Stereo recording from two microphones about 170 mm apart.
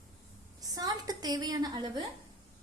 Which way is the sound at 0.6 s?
20° right (ahead or behind).